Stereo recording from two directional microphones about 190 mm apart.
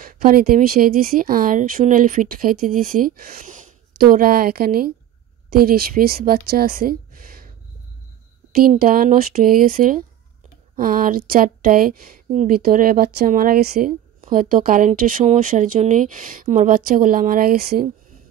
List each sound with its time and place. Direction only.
0.0 s speech: 50° right (ahead or behind)
8.8 s speech: 50° right (ahead or behind)